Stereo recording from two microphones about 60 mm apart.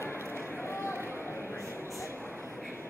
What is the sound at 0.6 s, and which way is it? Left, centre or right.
Run, left.